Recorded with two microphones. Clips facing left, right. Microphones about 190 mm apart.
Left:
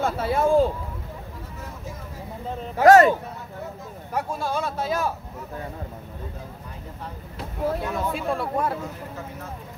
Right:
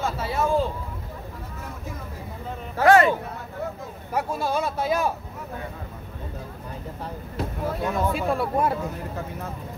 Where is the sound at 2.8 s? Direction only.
40° left (ahead or behind).